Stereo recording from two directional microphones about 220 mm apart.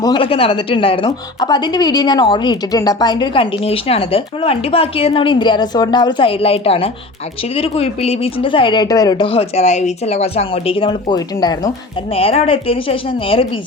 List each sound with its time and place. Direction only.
0.0 s a woman's voice: 20° left (ahead or behind)